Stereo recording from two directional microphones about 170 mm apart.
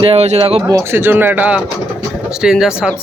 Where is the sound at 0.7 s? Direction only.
15° right (ahead or behind).